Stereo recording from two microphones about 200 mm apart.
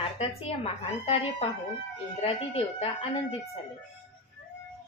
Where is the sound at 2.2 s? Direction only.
30° left (ahead or behind).